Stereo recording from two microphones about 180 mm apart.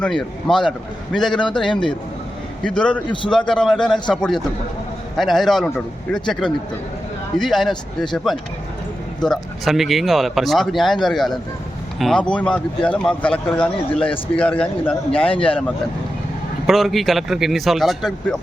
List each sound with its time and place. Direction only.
0.0 s speech: 5° left (ahead or behind)
1.6 s speech: 25° left (ahead or behind)
2.6 s speech: 5° left (ahead or behind)
13.9 s speech: 30° left (ahead or behind)
14.3 s speech: 5° left (ahead or behind)
15.1 s speech: 30° left (ahead or behind)
16.6 s speech: centre (ahead or behind)